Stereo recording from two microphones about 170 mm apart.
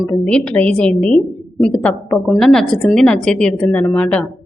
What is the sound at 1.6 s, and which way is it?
A woman's voice, 5° left (ahead or behind).